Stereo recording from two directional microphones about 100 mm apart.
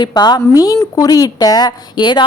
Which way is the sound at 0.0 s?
45° left (ahead or behind).